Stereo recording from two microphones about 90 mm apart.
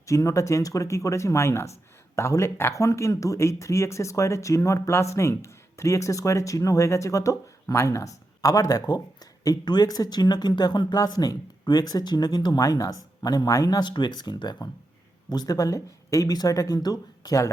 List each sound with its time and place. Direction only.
0.1 s speech: 35° left (ahead or behind)